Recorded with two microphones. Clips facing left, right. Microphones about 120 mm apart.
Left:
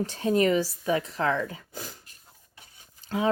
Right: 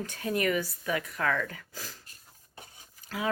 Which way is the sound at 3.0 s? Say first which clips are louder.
Left 7 dB; 30° left (ahead or behind).